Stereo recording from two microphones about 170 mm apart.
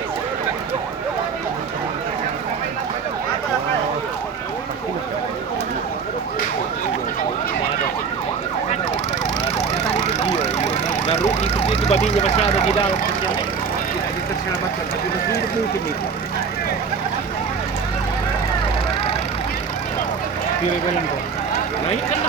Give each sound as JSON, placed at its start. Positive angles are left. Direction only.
{"t": 10.1, "sound": "emergency vehicle", "side_deg": 40}